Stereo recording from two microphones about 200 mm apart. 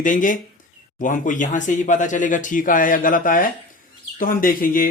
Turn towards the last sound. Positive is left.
turn(degrees=45)  # may be behind; listen again after turning